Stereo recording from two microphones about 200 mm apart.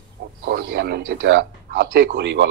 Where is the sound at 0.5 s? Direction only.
55° right (ahead or behind).